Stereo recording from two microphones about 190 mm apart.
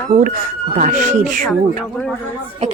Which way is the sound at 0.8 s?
40° right (ahead or behind).